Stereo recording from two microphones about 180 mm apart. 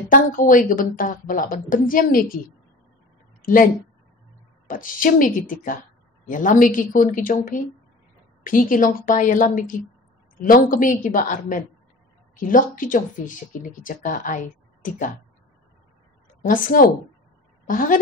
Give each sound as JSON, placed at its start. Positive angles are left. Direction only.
{"t": 0.1, "sound": "speech", "side_deg": 50}
{"t": 4.6, "sound": "speech", "side_deg": 50}
{"t": 16.4, "sound": "a woman's voice", "side_deg": 50}